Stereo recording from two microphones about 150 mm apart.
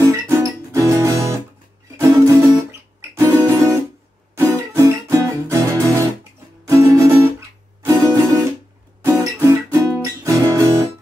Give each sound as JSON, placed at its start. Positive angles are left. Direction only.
{"t": 0.0, "sound": "music", "side_deg": -20}